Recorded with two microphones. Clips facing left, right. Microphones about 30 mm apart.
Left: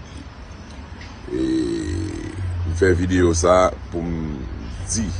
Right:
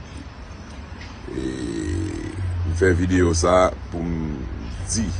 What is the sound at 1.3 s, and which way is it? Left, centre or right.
Music, left.